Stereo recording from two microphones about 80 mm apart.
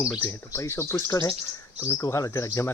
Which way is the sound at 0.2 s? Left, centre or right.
Left.